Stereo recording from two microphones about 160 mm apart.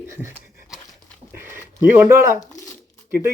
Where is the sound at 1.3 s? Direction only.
15° right (ahead or behind).